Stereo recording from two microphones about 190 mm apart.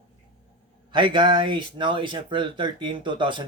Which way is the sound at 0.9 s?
25° right (ahead or behind).